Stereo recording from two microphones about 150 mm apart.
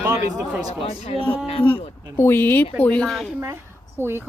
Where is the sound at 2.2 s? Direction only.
15° left (ahead or behind).